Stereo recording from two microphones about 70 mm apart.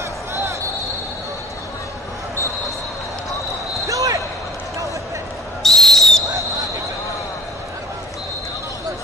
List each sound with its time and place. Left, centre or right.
0.3 s a sound: right
3.8 s basketball bounce: right
5.6 s whistle: centre